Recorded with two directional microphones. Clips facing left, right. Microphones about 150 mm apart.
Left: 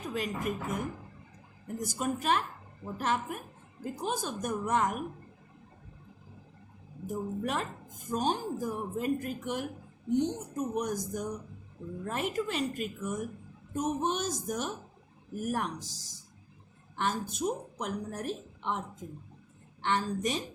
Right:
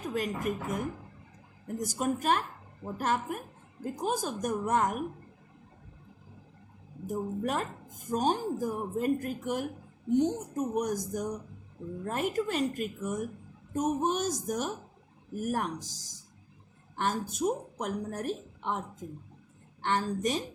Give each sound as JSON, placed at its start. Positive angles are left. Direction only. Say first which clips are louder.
{"t": 0.1, "sound": "a woman's voice", "louder": "right 2 dB", "side_deg": -45}
{"t": 7.1, "sound": "a woman's voice", "louder": "right 2 dB", "side_deg": -45}
{"t": 16.9, "sound": "a woman's voice", "louder": "right 1 dB", "side_deg": -45}
{"t": 19.8, "sound": "speech", "louder": "right 1 dB", "side_deg": -45}